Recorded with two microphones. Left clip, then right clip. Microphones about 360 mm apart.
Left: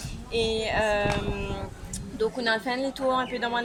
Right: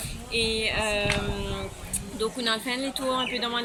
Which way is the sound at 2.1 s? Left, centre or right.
Left.